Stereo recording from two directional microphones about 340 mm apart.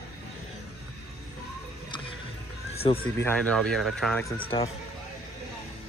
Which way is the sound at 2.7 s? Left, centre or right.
Centre.